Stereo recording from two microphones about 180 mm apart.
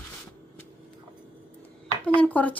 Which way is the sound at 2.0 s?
5° left (ahead or behind).